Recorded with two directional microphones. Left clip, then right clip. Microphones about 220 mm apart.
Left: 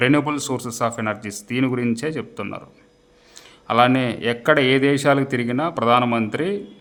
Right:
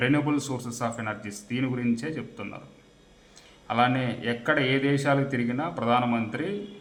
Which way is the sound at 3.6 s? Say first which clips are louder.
Left 8 dB; 55° left (ahead or behind).